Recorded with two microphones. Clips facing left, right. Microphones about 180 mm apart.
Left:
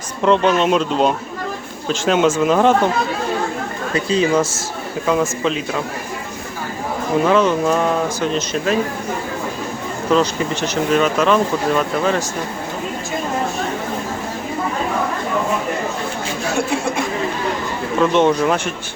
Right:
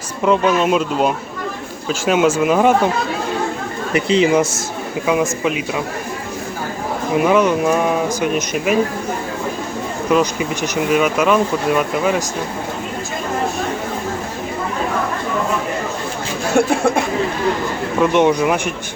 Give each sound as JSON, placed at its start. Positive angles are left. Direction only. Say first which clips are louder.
{"t": 0.2, "sound": "speech", "louder": "even", "side_deg": -5}
{"t": 3.9, "sound": "speech", "louder": "right 2 dB", "side_deg": -20}
{"t": 7.2, "sound": "speech", "louder": "right 1 dB", "side_deg": -10}
{"t": 10.1, "sound": "speech", "louder": "even", "side_deg": -10}
{"t": 18.0, "sound": "speech", "louder": "right 1 dB", "side_deg": -15}